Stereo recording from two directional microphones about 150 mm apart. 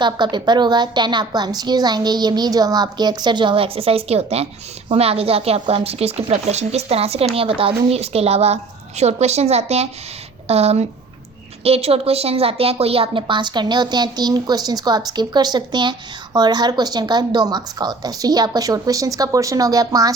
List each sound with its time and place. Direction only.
0.0 s a woman's voice: 30° right (ahead or behind)